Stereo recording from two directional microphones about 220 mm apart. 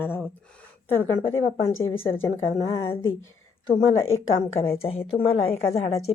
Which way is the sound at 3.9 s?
65° left (ahead or behind).